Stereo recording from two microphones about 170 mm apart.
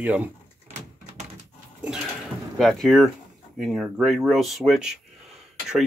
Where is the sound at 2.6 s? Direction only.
Centre (ahead or behind).